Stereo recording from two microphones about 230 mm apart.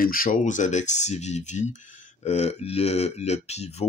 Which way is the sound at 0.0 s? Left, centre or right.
Left.